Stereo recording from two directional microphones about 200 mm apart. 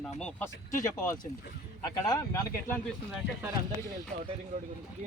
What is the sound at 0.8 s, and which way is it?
Speech, 15° left (ahead or behind).